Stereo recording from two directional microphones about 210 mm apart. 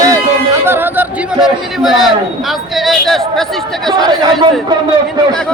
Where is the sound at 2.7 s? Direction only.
Centre (ahead or behind).